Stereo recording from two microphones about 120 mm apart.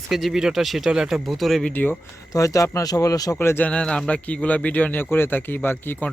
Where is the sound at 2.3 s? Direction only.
30° left (ahead or behind).